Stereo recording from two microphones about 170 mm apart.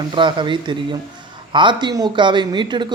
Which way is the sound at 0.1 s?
30° right (ahead or behind).